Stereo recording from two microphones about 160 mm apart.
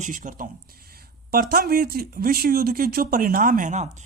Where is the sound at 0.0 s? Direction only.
55° right (ahead or behind).